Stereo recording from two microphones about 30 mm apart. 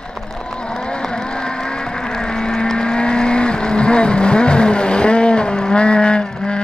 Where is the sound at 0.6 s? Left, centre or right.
Left.